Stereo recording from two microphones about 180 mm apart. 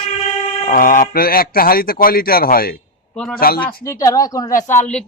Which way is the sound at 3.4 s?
55° left (ahead or behind).